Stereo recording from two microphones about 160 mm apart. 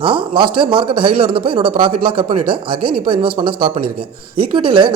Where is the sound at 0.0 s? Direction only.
35° right (ahead or behind).